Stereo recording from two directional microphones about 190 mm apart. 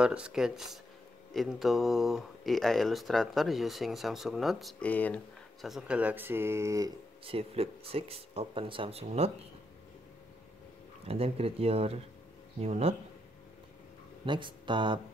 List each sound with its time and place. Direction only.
0.0 s speech: 5° right (ahead or behind)
7.2 s speech: 30° right (ahead or behind)
11.1 s speech: 30° right (ahead or behind)
14.2 s speech: 25° right (ahead or behind)